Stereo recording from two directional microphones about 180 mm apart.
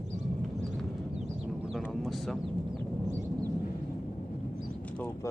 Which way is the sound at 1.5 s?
Centre (ahead or behind).